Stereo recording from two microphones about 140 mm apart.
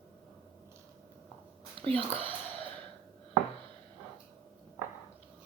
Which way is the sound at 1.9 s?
40° right (ahead or behind).